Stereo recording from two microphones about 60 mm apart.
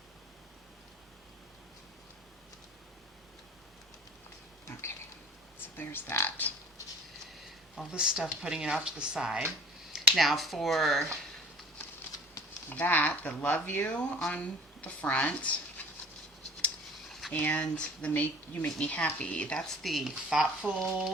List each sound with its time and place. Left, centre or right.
4.7 s a sound: left
5.7 s speech: left
7.9 s speech: centre
10.2 s speech: centre
12.7 s speech: left
13.8 s speech: centre
17.1 s a sound: centre
17.3 s speech: left
19.6 s speech: centre
20.3 s speech: centre